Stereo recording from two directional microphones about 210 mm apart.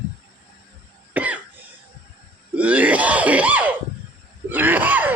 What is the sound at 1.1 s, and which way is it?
Cough, 5° right (ahead or behind).